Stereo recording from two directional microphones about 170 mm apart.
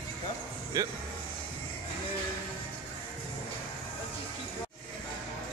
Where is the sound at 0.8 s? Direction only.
20° right (ahead or behind).